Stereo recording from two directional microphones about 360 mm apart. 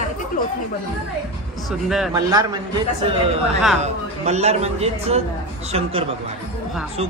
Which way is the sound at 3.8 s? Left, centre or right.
Centre.